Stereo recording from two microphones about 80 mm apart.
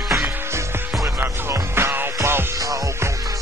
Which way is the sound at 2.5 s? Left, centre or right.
Right.